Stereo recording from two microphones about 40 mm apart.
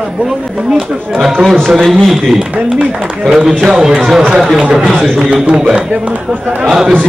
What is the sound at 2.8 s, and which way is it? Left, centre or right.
Speech, right.